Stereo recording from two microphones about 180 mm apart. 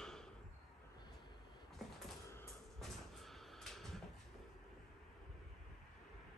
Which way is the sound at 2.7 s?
Centre (ahead or behind).